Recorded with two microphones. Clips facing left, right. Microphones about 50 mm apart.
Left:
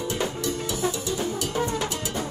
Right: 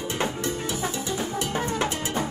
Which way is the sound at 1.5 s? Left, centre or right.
Right.